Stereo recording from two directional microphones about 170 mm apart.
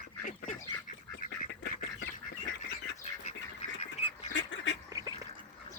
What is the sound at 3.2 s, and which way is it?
Duck, 40° left (ahead or behind).